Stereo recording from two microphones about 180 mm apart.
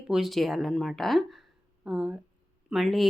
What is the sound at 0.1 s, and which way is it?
Speech, centre (ahead or behind).